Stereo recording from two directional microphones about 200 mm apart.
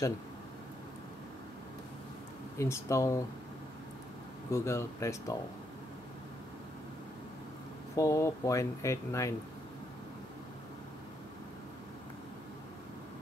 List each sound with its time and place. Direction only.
2.6 s speech: 15° left (ahead or behind)
4.5 s speech: 15° left (ahead or behind)
7.9 s speech: 15° left (ahead or behind)